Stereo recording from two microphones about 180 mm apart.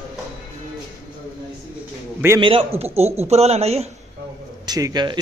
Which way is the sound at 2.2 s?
15° right (ahead or behind).